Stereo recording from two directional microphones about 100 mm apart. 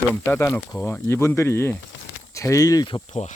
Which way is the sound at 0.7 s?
30° left (ahead or behind).